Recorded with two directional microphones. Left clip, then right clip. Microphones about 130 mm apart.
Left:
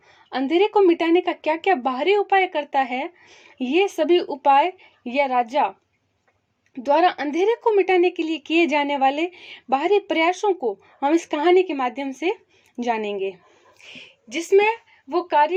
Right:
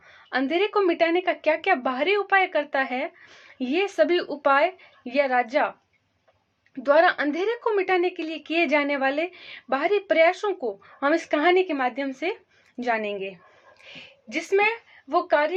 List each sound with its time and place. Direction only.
0.3 s speech: 45° left (ahead or behind)
6.8 s a woman's voice: 45° left (ahead or behind)